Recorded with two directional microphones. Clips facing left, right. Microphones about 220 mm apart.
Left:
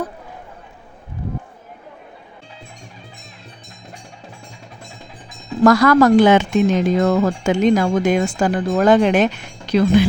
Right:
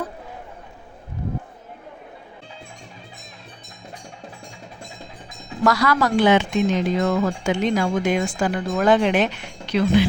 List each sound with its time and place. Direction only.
5.6 s speech: 50° left (ahead or behind)